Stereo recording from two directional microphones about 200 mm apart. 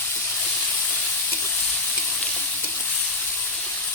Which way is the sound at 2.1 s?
5° left (ahead or behind).